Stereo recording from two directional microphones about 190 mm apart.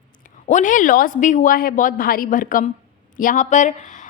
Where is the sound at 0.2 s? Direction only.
40° left (ahead or behind).